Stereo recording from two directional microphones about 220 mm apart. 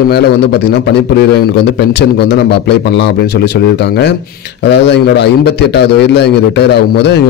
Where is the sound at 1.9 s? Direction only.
50° left (ahead or behind).